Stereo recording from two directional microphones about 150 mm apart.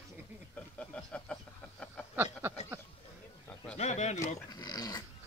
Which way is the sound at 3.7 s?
50° left (ahead or behind).